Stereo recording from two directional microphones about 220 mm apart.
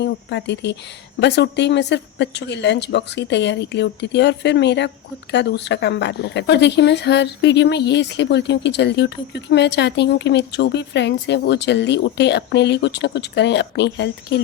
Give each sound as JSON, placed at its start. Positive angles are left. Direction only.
{"t": 0.0, "sound": "speech", "side_deg": 50}